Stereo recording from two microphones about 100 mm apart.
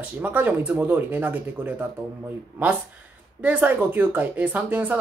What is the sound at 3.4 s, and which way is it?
Speech, 15° right (ahead or behind).